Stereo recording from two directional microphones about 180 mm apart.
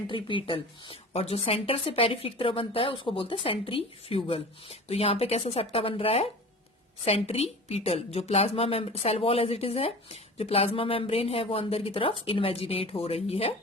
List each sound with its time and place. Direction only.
0.1 s a woman's voice: 30° left (ahead or behind)